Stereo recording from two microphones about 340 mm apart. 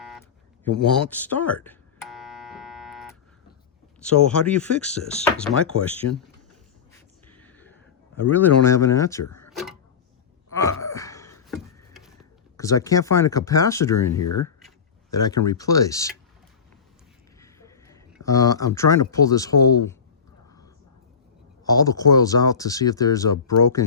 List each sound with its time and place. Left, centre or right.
0.0 s a sound: centre
0.8 s buzzer: centre
4.0 s speech: centre
6.0 s speech: left
7.3 s a sound: centre
8.3 s speech: centre
9.5 s a sound: centre
10.6 s gasp: centre
12.5 s speech: centre
14.2 s speech: left
15.1 s speech: centre
17.4 s a sound: centre
18.2 s speech: centre
21.6 s speech: centre